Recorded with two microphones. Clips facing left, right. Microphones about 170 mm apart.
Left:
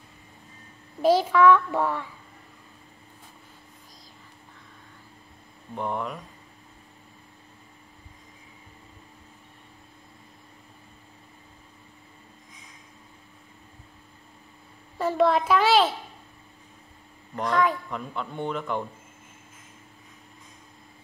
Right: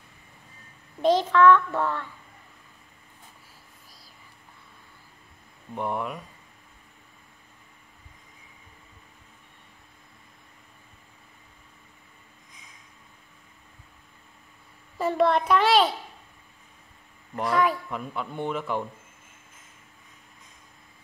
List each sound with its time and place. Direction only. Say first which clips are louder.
1.0 s a child's voice: even; 10° left (ahead or behind)
5.8 s speech: even; 5° right (ahead or behind)
15.0 s speech: even; centre (ahead or behind)
17.4 s speech: even; 5° right (ahead or behind)